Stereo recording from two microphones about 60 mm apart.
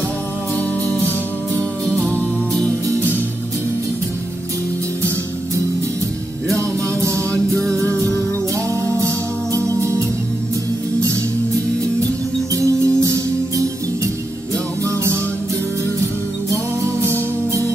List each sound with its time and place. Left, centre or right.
6.5 s music: right
9.0 s music: right
12.5 s music: right
17.0 s music: right